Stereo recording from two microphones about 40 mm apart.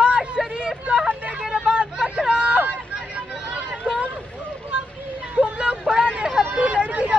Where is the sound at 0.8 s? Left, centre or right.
Right.